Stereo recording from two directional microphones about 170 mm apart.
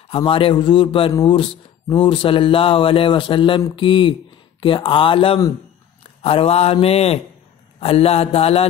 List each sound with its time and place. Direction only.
0.1 s a man's voice: 30° left (ahead or behind)